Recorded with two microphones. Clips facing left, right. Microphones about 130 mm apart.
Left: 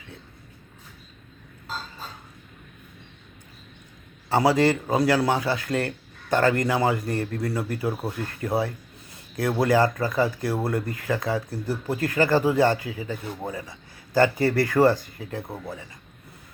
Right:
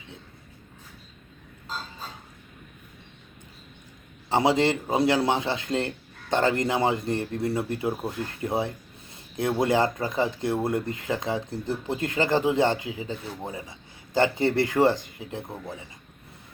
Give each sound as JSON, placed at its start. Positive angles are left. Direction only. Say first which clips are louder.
{"t": 4.3, "sound": "speech", "louder": "left 2 dB", "side_deg": -20}